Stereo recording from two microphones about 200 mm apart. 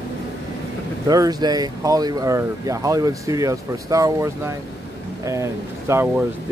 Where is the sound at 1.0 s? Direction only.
20° right (ahead or behind).